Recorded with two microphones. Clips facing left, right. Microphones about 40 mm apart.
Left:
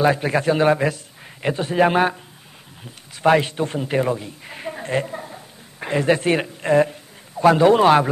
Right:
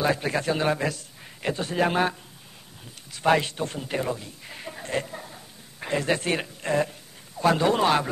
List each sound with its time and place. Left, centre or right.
0.0 s a man's voice: left
5.9 s a man's voice: left
7.5 s a man's voice: left